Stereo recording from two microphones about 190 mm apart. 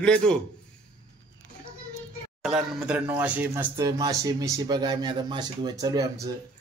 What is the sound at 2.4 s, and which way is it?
Speech, 5° right (ahead or behind).